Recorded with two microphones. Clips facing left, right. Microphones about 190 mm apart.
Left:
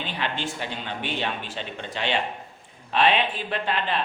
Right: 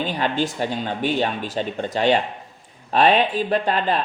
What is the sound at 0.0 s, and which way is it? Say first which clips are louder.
Speech: right 7 dB; 40° right (ahead or behind).